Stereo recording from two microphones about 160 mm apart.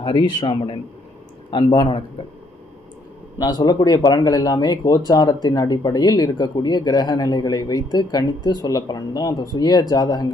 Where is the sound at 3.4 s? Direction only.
25° left (ahead or behind).